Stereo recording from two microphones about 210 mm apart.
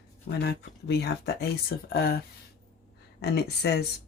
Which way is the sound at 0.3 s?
50° left (ahead or behind).